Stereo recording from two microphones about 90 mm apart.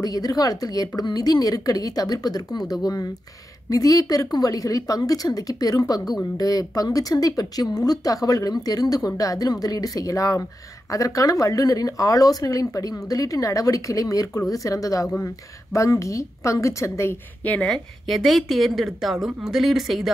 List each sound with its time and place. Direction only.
0.0 s a woman's voice: 45° left (ahead or behind)
17.5 s a woman's voice: 10° left (ahead or behind)